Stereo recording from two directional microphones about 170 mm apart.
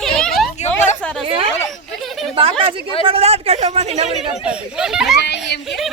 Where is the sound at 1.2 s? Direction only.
35° right (ahead or behind).